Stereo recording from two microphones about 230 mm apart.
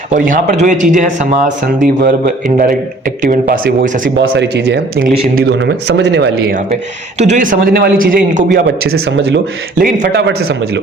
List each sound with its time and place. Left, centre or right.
0.1 s a man's voice: right
3.2 s a man's voice: right
4.2 s speech: right
5.0 s a man's voice: right
8.9 s speech: right